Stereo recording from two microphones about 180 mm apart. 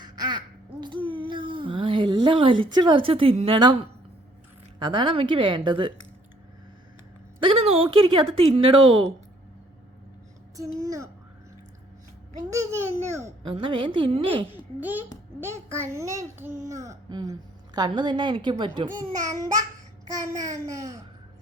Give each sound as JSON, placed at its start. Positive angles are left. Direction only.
{"t": 0.0, "sound": "a sound", "side_deg": -25}
{"t": 4.8, "sound": "a child's voice", "side_deg": -25}
{"t": 7.3, "sound": "speech", "side_deg": -30}
{"t": 10.8, "sound": "a child's voice", "side_deg": -15}
{"t": 13.6, "sound": "a child's voice", "side_deg": -30}
{"t": 14.5, "sound": "a child's voice", "side_deg": -10}